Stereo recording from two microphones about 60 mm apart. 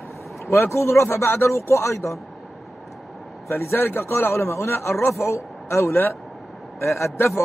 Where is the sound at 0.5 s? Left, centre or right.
Left.